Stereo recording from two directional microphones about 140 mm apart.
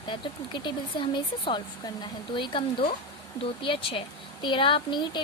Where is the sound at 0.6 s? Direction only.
35° left (ahead or behind).